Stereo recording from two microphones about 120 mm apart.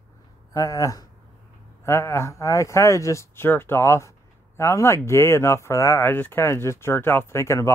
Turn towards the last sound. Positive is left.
turn(degrees=25)  # may be behind; listen again after turning